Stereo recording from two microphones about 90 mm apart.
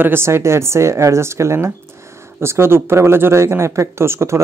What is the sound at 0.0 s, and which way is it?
Speech, 25° right (ahead or behind).